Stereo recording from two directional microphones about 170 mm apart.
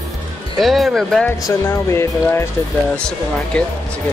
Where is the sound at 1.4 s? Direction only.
20° left (ahead or behind).